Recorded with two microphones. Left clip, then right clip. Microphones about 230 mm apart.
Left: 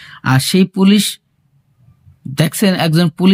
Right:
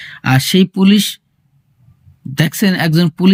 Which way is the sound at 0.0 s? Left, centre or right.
Centre.